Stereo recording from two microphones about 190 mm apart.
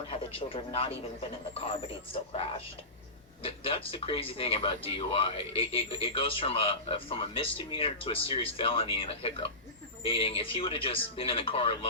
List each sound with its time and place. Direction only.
0.1 s speech: 30° left (ahead or behind)